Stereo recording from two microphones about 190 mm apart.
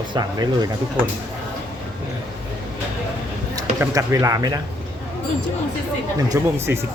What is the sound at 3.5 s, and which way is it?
Speech, 15° right (ahead or behind).